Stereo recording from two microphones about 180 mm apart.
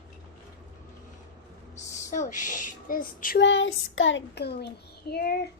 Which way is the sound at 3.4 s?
90° left.